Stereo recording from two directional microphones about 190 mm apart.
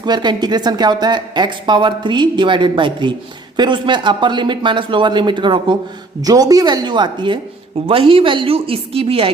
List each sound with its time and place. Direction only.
0.0 s speech: 20° right (ahead or behind)